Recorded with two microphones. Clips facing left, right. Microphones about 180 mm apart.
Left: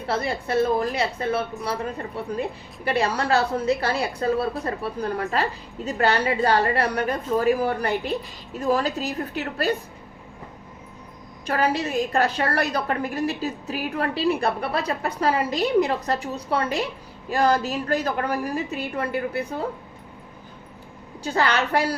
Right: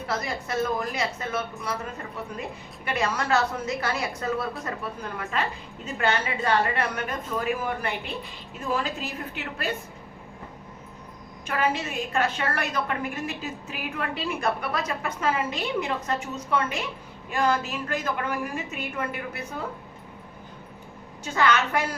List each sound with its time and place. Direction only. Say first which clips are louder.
0.1 s a woman's voice: left 6 dB; 30° left (ahead or behind)
11.4 s a woman's voice: left 4 dB; 35° left (ahead or behind)
21.2 s a woman's voice: left 1 dB; 35° left (ahead or behind)